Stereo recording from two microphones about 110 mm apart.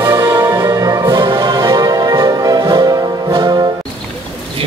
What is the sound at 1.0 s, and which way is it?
Music, 40° right (ahead or behind).